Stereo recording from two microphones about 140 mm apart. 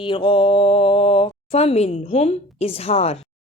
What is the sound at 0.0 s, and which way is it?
Speech, 35° left (ahead or behind).